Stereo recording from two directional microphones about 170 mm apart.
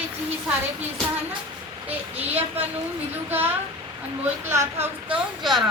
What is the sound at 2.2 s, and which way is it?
Speech, 35° right (ahead or behind).